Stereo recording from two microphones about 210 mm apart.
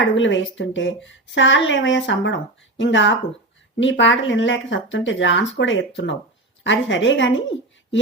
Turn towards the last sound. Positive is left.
turn(degrees=65)  # may be behind; listen again after turning